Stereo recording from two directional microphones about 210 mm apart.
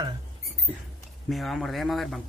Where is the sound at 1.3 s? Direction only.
Centre (ahead or behind).